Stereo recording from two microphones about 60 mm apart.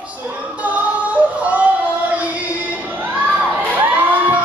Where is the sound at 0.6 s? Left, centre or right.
Right.